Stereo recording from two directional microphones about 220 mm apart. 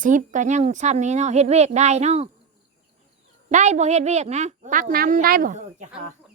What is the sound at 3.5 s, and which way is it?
A woman's voice, 35° right (ahead or behind).